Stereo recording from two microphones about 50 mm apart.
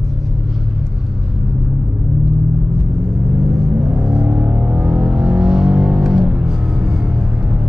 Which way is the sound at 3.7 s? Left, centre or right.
Centre.